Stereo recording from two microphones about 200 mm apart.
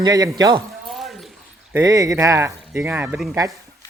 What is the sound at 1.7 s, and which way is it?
Speech, 15° right (ahead or behind).